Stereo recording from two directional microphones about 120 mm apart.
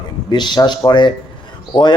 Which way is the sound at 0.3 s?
40° left (ahead or behind).